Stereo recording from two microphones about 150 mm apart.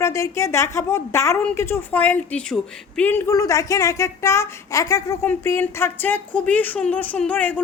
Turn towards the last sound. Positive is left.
turn(degrees=10)  # may be behind; listen again after turning